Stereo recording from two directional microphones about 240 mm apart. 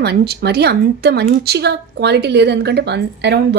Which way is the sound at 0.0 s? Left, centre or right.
Right.